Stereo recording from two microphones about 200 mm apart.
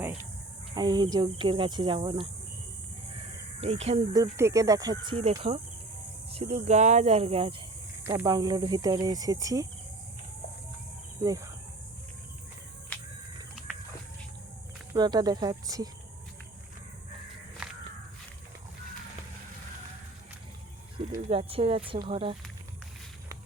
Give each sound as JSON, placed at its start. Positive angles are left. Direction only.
{"t": 0.0, "sound": "cricket", "side_deg": -10}
{"t": 0.7, "sound": "speech", "side_deg": -20}
{"t": 3.6, "sound": "speech", "side_deg": -30}
{"t": 4.1, "sound": "speech", "side_deg": -15}
{"t": 8.0, "sound": "speech", "side_deg": -15}
{"t": 11.2, "sound": "speech", "side_deg": -20}
{"t": 14.9, "sound": "speech", "side_deg": -20}
{"t": 17.6, "sound": "crow", "side_deg": -5}
{"t": 21.2, "sound": "speech", "side_deg": -30}